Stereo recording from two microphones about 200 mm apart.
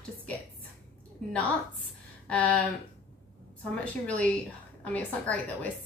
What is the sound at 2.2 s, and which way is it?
Speech, 5° left (ahead or behind).